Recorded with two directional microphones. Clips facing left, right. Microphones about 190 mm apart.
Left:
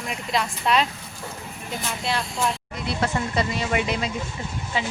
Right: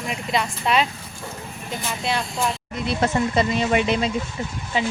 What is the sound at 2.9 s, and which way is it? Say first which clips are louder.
Speech: right 4 dB; 25° right (ahead or behind).